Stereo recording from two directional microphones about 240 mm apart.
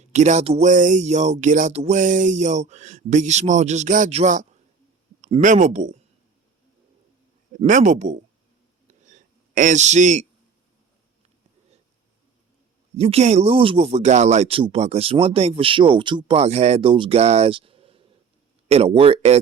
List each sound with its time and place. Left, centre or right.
0.0 s speech: right
7.5 s speech: right
9.0 s a sound: right
13.0 s speech: right